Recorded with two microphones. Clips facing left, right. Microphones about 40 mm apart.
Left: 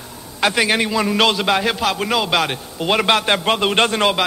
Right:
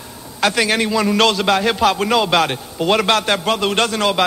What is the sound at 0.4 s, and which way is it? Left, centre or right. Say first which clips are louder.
A man's voice: even; centre.